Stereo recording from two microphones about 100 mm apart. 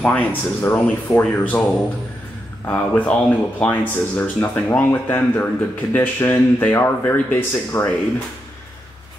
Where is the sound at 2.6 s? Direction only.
15° left (ahead or behind).